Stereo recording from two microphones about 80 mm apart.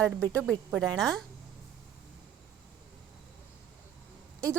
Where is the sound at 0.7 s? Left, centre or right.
Centre.